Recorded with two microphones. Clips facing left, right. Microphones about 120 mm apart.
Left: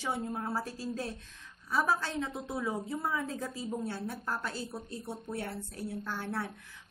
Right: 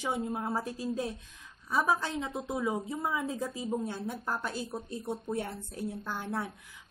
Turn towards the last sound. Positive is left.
turn(degrees=-15)  # may be behind; listen again after turning